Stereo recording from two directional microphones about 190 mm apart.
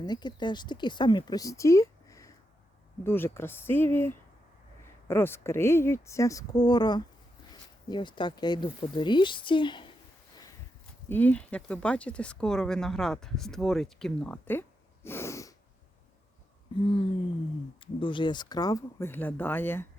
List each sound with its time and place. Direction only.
0.0 s speech: 20° left (ahead or behind)
11.1 s speech: 10° left (ahead or behind)
15.0 s sneeze: 15° left (ahead or behind)
16.8 s speech: 30° left (ahead or behind); by 19.9 s 10° left (ahead or behind)